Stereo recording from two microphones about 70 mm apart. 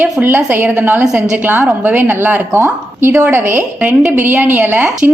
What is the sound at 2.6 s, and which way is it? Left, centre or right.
A woman's voice, right.